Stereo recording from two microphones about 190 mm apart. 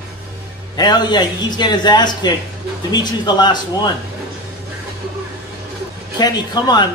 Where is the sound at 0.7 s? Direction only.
20° left (ahead or behind).